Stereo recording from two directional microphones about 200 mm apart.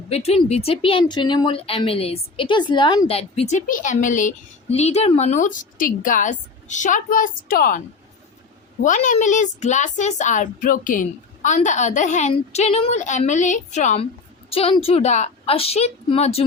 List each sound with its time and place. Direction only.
0.1 s a woman's voice: 30° left (ahead or behind); by 7.8 s 45° left (ahead or behind)
8.8 s a woman's voice: 40° left (ahead or behind)